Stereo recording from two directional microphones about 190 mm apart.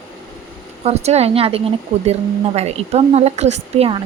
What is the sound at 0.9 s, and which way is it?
A woman's voice, 35° right (ahead or behind).